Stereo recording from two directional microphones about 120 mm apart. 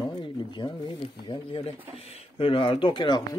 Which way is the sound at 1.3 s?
45° left (ahead or behind).